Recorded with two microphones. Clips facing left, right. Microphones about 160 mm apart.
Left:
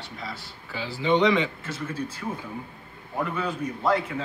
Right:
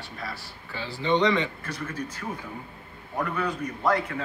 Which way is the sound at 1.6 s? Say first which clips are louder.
Left 2 dB; 25° left (ahead or behind).